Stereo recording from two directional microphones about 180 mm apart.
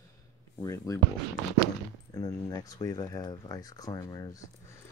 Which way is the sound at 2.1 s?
20° left (ahead or behind).